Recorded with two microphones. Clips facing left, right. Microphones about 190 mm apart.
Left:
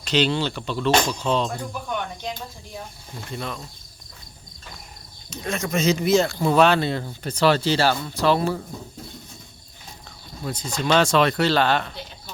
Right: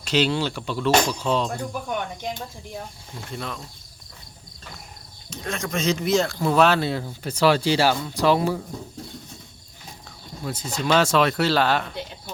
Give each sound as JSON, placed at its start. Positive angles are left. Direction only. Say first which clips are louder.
{"t": 0.0, "sound": "speech", "louder": "even", "side_deg": -5}
{"t": 3.3, "sound": "speech", "louder": "left 1 dB", "side_deg": 0}
{"t": 5.3, "sound": "speech", "louder": "left 3 dB", "side_deg": 0}
{"t": 10.4, "sound": "speech", "louder": "left 1 dB", "side_deg": -5}